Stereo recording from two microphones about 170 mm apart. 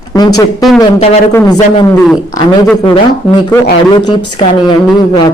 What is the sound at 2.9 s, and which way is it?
Speech, 25° left (ahead or behind).